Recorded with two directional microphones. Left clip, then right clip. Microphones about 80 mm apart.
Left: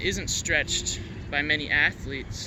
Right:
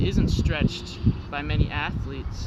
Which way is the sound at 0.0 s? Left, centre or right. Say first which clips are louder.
Even; centre.